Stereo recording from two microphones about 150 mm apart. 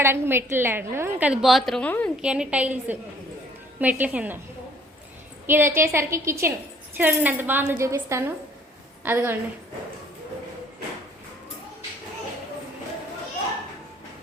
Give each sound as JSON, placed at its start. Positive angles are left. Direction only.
{"t": 0.0, "sound": "speech", "side_deg": -15}
{"t": 1.3, "sound": "a woman's voice", "side_deg": 0}
{"t": 2.2, "sound": "speech", "side_deg": -5}
{"t": 5.5, "sound": "speech", "side_deg": -15}